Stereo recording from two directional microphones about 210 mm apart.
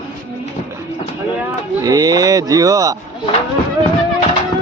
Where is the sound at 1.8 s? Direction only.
15° right (ahead or behind).